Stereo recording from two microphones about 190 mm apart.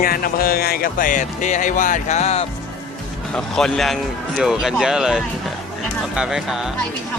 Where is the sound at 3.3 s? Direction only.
5° left (ahead or behind).